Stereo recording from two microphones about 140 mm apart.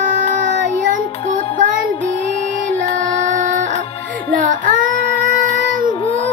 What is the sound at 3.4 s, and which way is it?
Music, 60° right (ahead or behind).